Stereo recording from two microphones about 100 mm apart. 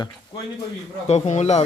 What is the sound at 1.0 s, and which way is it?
Speech, 90° left.